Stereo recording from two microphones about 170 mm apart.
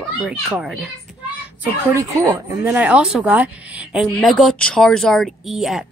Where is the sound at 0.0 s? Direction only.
5° right (ahead or behind).